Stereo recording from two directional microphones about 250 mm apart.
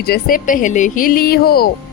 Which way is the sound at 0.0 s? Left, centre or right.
Left.